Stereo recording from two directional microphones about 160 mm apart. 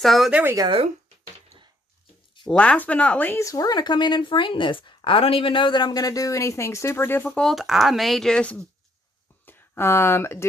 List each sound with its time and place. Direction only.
0.0 s speech: centre (ahead or behind)
0.5 s speech: 25° right (ahead or behind)
2.5 s speech: 5° left (ahead or behind)